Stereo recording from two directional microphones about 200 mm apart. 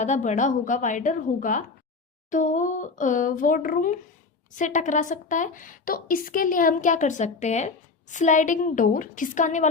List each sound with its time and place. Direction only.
0.0 s a woman's voice: 35° left (ahead or behind)